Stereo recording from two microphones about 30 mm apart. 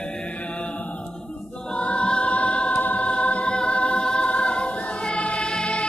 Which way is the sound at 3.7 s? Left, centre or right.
Left.